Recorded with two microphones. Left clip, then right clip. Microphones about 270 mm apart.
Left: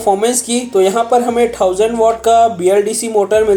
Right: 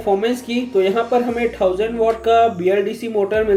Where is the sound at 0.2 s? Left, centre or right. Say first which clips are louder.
Left 5 dB; centre.